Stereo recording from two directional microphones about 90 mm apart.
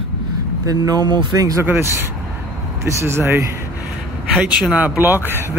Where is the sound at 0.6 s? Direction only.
45° right (ahead or behind).